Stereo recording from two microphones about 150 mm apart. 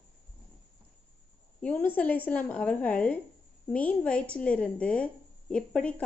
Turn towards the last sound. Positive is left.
turn(degrees=5)  # may be behind; listen again after turning